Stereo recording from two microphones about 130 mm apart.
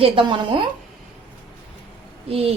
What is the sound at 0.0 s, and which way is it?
Speech, 40° right (ahead or behind).